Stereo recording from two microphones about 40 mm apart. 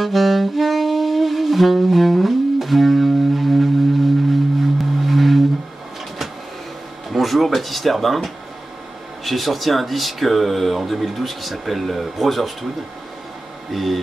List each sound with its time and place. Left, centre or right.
0.0 s saxophone: centre
4.3 s music: centre
7.1 s speech: centre
13.7 s speech: centre